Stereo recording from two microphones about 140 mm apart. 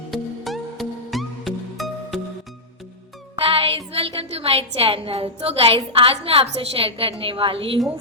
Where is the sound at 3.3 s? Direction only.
40° right (ahead or behind).